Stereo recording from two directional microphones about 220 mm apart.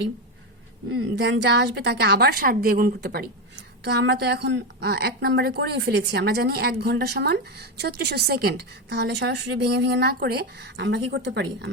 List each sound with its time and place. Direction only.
1.1 s a woman's voice: 50° right (ahead or behind)